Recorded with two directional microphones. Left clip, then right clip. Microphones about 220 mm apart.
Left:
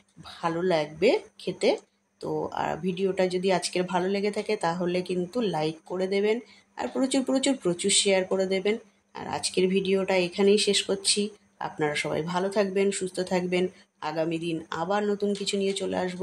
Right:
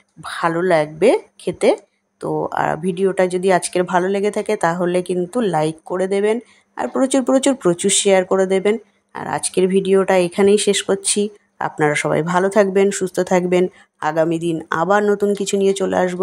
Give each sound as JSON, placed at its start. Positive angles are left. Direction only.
{"t": 0.2, "sound": "speech", "side_deg": -30}